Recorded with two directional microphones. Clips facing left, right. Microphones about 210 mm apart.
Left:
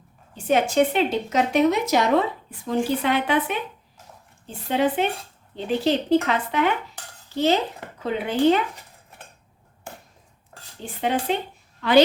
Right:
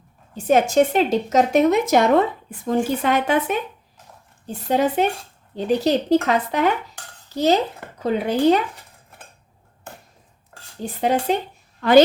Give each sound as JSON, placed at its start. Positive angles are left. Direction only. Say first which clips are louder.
{"t": 0.3, "sound": "a woman's voice", "louder": "right 3 dB", "side_deg": -45}
{"t": 10.8, "sound": "a woman's voice", "louder": "right 4 dB", "side_deg": -40}